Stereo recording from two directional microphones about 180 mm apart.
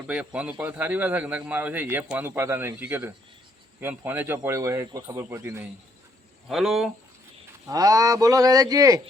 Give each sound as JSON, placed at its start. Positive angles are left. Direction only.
{"t": 0.1, "sound": "a man's voice", "side_deg": -5}
{"t": 6.5, "sound": "speech", "side_deg": 0}
{"t": 7.7, "sound": "speech", "side_deg": -20}